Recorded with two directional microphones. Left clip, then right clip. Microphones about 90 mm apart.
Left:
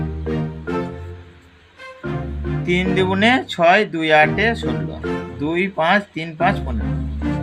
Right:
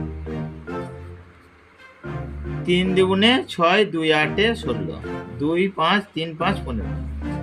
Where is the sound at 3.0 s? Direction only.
90° left.